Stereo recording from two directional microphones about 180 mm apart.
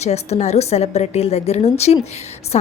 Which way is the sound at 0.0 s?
35° left (ahead or behind).